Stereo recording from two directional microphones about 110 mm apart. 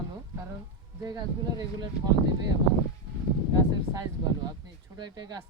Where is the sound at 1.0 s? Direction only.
35° right (ahead or behind).